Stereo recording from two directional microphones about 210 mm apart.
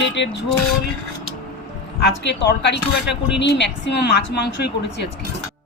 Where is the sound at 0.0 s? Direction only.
55° left (ahead or behind).